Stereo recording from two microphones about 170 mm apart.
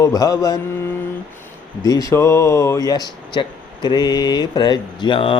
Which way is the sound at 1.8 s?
20° left (ahead or behind).